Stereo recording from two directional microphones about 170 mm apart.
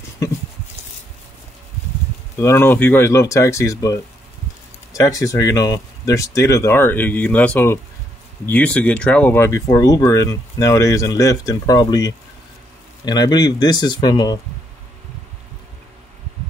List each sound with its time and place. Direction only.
2.3 s speech: 15° left (ahead or behind)